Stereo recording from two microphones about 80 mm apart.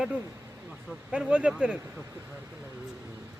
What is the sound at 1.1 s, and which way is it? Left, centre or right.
Speech, centre.